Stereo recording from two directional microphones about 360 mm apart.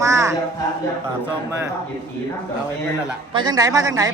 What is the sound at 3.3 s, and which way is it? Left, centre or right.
Speech, centre.